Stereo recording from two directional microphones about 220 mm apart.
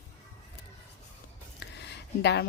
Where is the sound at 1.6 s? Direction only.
50° left (ahead or behind).